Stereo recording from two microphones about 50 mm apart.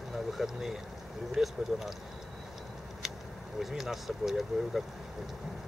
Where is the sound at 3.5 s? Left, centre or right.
Centre.